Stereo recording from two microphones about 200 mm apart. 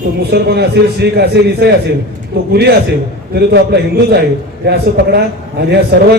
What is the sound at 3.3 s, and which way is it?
A man's voice, 55° right (ahead or behind).